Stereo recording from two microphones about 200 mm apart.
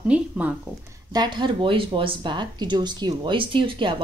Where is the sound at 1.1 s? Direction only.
20° right (ahead or behind).